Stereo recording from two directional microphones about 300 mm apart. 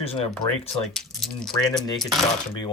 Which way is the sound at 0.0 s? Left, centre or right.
Centre.